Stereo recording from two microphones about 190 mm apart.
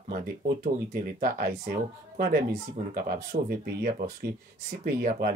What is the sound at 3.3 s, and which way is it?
Speech, 45° right (ahead or behind).